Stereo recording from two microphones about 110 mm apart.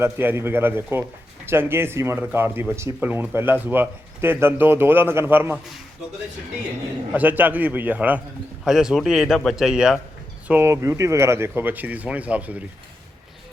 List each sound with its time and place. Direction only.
0.0 s speech: 20° right (ahead or behind)
7.1 s a man's voice: 15° right (ahead or behind)
10.5 s speech: 25° right (ahead or behind)